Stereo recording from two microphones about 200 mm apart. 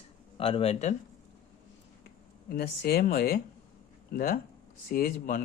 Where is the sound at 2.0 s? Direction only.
50° left (ahead or behind).